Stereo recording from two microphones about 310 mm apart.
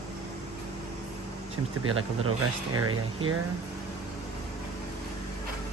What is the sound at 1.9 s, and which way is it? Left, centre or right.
Speech, right.